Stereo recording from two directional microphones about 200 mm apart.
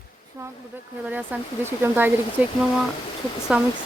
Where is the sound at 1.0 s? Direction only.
10° right (ahead or behind).